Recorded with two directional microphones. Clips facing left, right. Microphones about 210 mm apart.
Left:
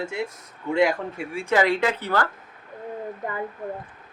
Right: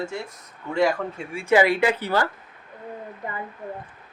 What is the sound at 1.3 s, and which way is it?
Speech, 5° right (ahead or behind).